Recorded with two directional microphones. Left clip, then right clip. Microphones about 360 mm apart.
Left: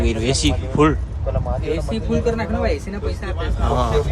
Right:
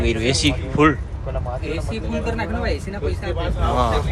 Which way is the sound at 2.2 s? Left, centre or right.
Centre.